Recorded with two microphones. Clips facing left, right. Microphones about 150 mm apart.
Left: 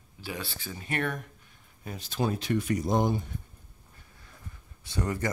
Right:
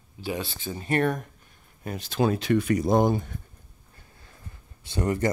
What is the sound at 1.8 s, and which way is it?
Speech, 85° right.